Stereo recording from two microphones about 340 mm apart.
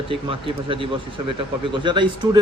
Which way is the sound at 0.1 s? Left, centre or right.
Centre.